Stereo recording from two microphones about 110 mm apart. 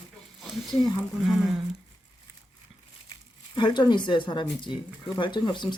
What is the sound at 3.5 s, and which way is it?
Speech, 40° left (ahead or behind).